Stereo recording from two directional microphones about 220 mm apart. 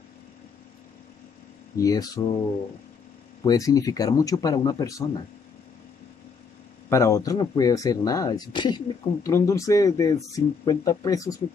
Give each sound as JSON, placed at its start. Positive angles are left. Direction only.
{"t": 1.8, "sound": "speech", "side_deg": 15}
{"t": 3.4, "sound": "speech", "side_deg": 15}
{"t": 6.9, "sound": "speech", "side_deg": 15}